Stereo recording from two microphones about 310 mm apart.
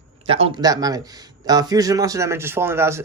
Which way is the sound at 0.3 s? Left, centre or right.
Centre.